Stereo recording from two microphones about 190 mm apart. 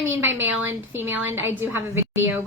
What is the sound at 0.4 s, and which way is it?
A woman's voice, 10° right (ahead or behind).